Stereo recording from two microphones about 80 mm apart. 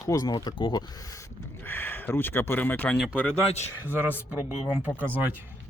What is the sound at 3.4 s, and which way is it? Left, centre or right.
Speech, right.